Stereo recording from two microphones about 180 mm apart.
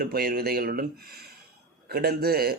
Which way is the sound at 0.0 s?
55° right (ahead or behind).